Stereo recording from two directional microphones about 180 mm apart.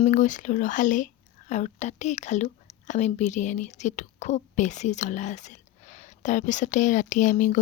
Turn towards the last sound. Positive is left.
turn(degrees=45)  # may be behind; listen again after turning